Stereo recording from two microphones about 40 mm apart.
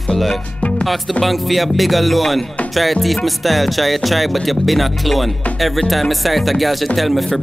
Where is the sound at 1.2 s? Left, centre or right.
Centre.